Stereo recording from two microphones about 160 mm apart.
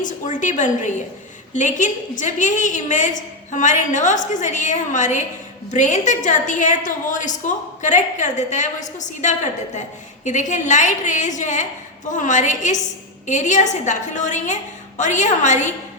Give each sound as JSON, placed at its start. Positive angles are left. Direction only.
{"t": 0.0, "sound": "a woman's voice", "side_deg": 50}